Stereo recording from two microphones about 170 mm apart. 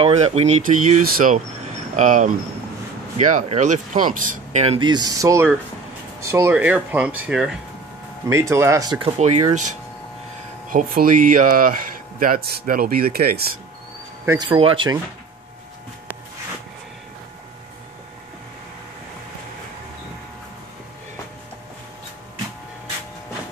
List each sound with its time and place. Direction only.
0.0 s speech: 40° right (ahead or behind)
1.0 s speech: 55° right (ahead or behind); by 7.5 s 5° right (ahead or behind)
8.3 s speech: 15° right (ahead or behind)
9.2 s speech: 45° right (ahead or behind); by 13.5 s 65° right (ahead or behind)
14.2 s speech: 15° right (ahead or behind)
14.5 s speech: 30° right (ahead or behind)